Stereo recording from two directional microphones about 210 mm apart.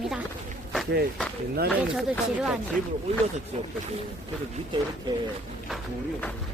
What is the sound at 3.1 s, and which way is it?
Speech, 30° right (ahead or behind).